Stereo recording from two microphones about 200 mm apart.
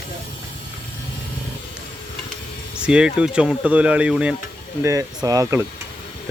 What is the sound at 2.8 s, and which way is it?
Speech, 5° right (ahead or behind).